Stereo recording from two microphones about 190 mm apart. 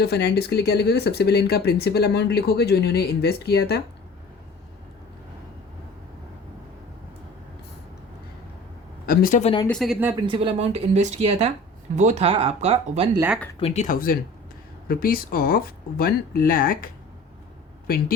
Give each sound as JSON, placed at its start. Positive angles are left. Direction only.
{"t": 0.0, "sound": "speech", "side_deg": 60}
{"t": 9.0, "sound": "speech", "side_deg": 50}
{"t": 9.4, "sound": "speech", "side_deg": 25}
{"t": 9.6, "sound": "speech", "side_deg": 0}
{"t": 10.0, "sound": "speech", "side_deg": -15}
{"t": 10.2, "sound": "speech", "side_deg": -25}
{"t": 13.6, "sound": "speech", "side_deg": 30}
{"t": 13.8, "sound": "speech", "side_deg": 50}